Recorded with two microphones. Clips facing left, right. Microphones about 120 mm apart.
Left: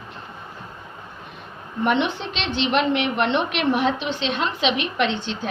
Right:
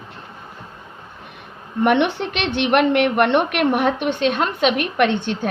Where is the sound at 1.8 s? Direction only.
65° right (ahead or behind).